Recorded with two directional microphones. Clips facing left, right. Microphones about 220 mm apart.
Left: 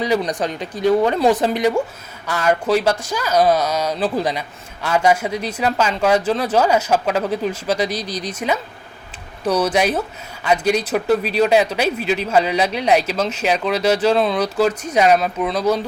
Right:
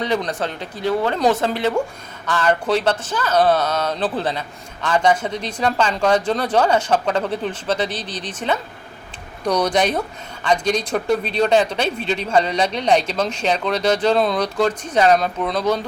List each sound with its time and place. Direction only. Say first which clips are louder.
0.0 s a man's voice: left 2 dB; 10° left (ahead or behind)